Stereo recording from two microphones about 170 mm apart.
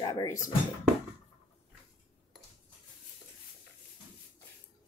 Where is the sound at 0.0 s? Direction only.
20° left (ahead or behind).